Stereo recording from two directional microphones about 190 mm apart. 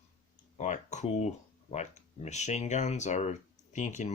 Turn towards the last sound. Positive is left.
turn(degrees=40)  # may be behind; listen again after turning